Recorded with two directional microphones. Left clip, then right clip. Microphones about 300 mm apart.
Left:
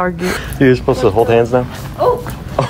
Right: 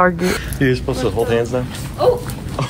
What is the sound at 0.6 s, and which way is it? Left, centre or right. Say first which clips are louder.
Speech: left 8 dB; left.